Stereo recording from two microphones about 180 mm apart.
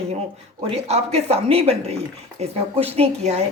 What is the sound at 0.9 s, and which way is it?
Speech, 35° right (ahead or behind).